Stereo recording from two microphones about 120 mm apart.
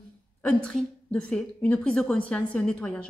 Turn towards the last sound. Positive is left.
turn(degrees=10)  # may be behind; listen again after turning